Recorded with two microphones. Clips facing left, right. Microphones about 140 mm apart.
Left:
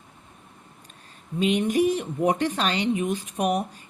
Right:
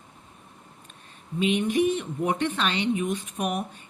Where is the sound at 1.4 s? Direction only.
40° left (ahead or behind).